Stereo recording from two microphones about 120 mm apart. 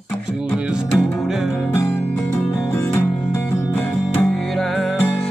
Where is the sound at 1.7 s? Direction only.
20° left (ahead or behind).